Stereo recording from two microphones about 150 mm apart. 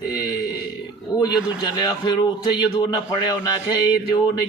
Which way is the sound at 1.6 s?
30° left (ahead or behind).